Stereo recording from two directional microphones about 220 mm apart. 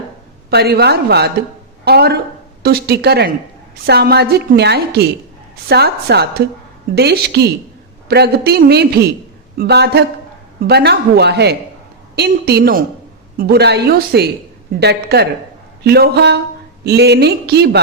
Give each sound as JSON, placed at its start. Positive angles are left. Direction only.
{"t": 0.5, "sound": "a woman's voice", "side_deg": -45}